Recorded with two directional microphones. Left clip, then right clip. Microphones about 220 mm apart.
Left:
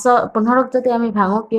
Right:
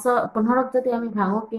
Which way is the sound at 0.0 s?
40° left (ahead or behind).